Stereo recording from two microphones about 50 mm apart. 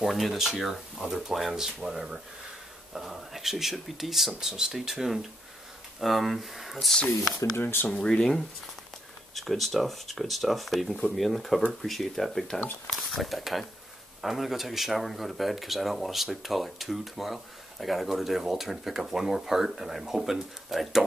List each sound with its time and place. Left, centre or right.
0.0 s speech: centre
1.0 s speech: centre
7.6 s speech: left
8.0 s speech: centre